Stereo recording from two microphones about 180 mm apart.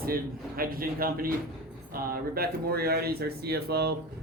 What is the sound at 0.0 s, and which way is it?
Speech, 55° right (ahead or behind).